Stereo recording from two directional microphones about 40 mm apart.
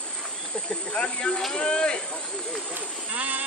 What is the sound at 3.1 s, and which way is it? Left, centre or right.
Speech, right.